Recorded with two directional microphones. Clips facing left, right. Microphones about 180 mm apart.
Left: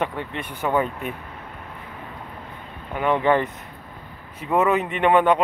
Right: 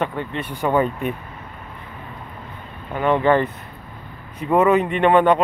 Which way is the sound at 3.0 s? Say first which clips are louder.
Right 3 dB; 10° left (ahead or behind).